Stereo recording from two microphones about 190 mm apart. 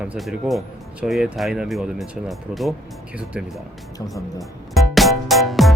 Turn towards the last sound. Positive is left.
turn(degrees=0)  # may be behind; listen again after turning